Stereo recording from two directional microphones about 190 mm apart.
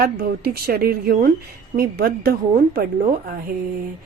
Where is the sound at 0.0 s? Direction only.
55° right (ahead or behind).